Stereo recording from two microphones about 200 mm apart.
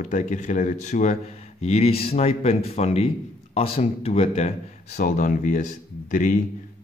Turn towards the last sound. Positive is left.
turn(degrees=40)  # may be behind; listen again after turning